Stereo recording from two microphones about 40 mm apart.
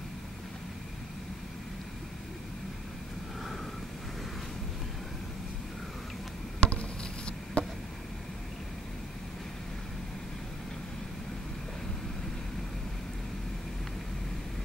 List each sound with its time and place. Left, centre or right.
6.6 s patter: left